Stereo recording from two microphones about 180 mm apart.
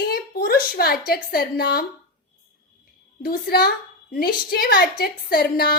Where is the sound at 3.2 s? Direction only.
55° left (ahead or behind).